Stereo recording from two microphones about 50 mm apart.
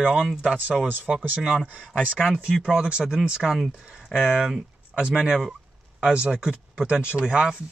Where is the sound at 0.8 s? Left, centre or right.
Right.